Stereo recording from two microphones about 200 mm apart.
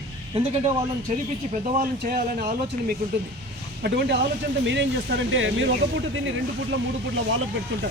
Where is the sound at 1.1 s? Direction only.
35° right (ahead or behind).